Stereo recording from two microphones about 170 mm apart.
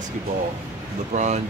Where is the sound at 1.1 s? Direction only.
45° right (ahead or behind).